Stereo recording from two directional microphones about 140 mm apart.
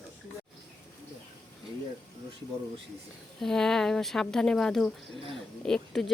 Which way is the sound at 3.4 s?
5° left (ahead or behind).